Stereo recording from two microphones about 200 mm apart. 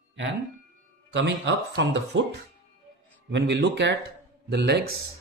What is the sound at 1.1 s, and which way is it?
Speech, 60° right (ahead or behind).